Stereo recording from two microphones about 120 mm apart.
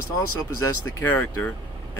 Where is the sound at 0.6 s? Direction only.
20° left (ahead or behind).